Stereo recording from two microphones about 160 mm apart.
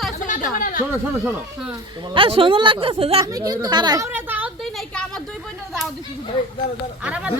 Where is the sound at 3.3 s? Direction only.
25° right (ahead or behind).